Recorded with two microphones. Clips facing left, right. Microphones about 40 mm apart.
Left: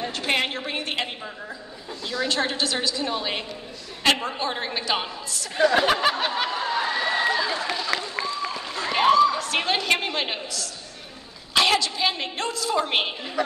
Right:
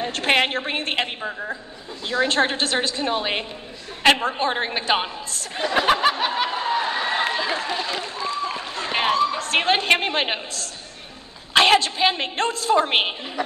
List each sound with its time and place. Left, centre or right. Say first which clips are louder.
0.1 s a woman's voice: right 6 dB; right
2.0 s a woman's voice: right 5 dB; right
5.8 s a sound: right 2 dB; centre
6.5 s chatter: right 2 dB; right
7.7 s a sound: even; right
11.5 s a woman's voice: right 5 dB; right